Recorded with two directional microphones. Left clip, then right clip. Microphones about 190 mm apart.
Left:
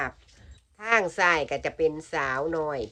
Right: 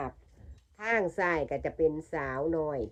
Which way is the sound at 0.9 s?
50° right (ahead or behind).